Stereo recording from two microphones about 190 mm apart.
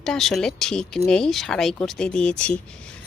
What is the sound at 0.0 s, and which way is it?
Speech, centre (ahead or behind).